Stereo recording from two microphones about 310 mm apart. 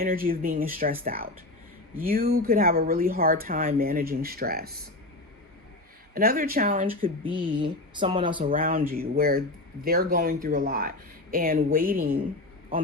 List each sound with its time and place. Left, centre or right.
0.0 s speech: right
6.1 s speech: right
8.4 s speech: right